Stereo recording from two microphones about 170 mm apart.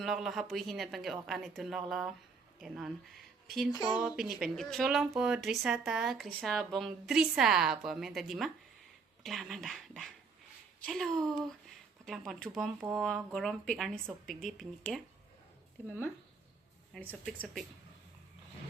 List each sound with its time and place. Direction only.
0.0 s speech: centre (ahead or behind)
3.7 s speech: 25° left (ahead or behind)
4.0 s speech: centre (ahead or behind)
16.9 s speech: 5° left (ahead or behind)